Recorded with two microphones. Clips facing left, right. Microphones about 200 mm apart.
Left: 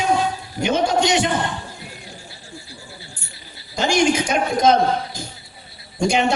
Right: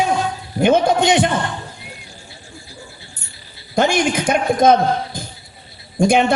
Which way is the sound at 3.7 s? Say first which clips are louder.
Right 1 dB; 55° right (ahead or behind).